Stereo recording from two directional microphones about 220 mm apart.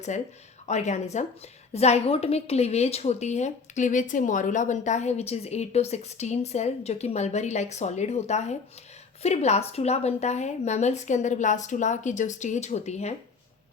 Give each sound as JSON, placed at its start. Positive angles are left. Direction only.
{"t": 0.7, "sound": "a woman's voice", "side_deg": 30}